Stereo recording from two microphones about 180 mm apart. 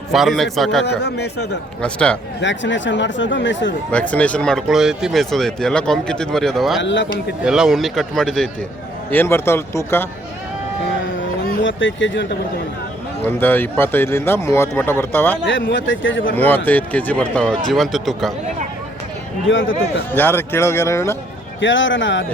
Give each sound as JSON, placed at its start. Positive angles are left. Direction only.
{"t": 0.1, "sound": "speech", "side_deg": 0}
{"t": 0.9, "sound": "speech", "side_deg": 65}
{"t": 1.8, "sound": "speech", "side_deg": 5}
{"t": 2.4, "sound": "speech", "side_deg": 90}
{"t": 4.1, "sound": "speech", "side_deg": 5}
{"t": 6.8, "sound": "speech", "side_deg": 90}
{"t": 7.4, "sound": "speech", "side_deg": -5}
{"t": 11.4, "sound": "speech", "side_deg": 90}
{"t": 13.2, "sound": "speech", "side_deg": 10}
{"t": 15.4, "sound": "speech", "side_deg": 90}
{"t": 16.4, "sound": "speech", "side_deg": 10}
{"t": 19.5, "sound": "speech", "side_deg": 90}
{"t": 20.1, "sound": "speech", "side_deg": 10}
{"t": 21.6, "sound": "speech", "side_deg": 90}